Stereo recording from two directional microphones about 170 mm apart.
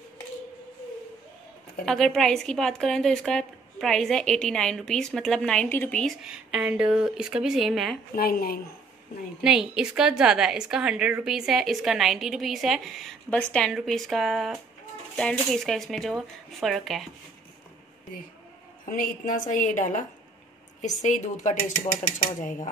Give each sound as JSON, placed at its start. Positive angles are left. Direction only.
{"t": 1.9, "sound": "a woman's voice", "side_deg": 0}
{"t": 8.2, "sound": "a woman's voice", "side_deg": 60}
{"t": 9.4, "sound": "a woman's voice", "side_deg": -5}
{"t": 18.9, "sound": "a woman's voice", "side_deg": 50}